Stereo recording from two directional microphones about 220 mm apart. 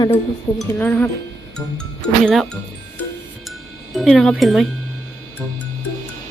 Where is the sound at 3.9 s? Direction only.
Centre (ahead or behind).